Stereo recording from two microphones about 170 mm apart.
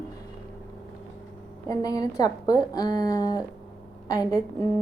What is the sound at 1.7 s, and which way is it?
A woman's voice, 20° left (ahead or behind).